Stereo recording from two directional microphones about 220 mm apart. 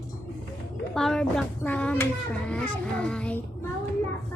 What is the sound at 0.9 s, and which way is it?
A child's voice, centre (ahead or behind).